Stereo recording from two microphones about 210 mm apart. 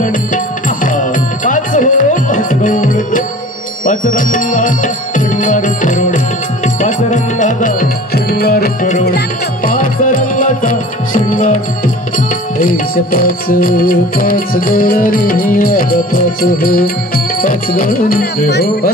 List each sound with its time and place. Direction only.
0.8 s music: 40° left (ahead or behind)